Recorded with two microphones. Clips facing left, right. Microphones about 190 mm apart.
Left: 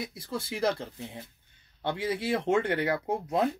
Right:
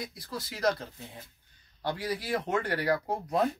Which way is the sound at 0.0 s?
25° left (ahead or behind).